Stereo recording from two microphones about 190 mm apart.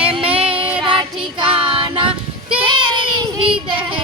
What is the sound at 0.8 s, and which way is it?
Child singing, 25° right (ahead or behind).